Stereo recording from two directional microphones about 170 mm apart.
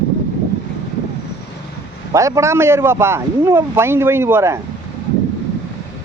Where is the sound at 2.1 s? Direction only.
20° right (ahead or behind).